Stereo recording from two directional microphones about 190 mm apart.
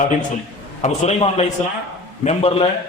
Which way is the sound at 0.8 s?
35° left (ahead or behind).